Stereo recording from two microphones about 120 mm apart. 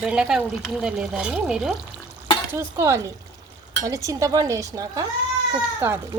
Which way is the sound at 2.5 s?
20° right (ahead or behind).